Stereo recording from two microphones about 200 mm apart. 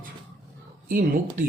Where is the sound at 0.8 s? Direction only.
45° right (ahead or behind).